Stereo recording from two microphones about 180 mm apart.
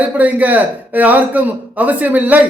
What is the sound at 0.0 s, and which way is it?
A man's voice, 10° right (ahead or behind).